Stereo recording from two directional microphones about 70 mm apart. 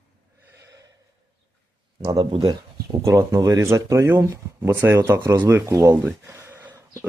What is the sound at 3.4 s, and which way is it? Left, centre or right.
Speech, right.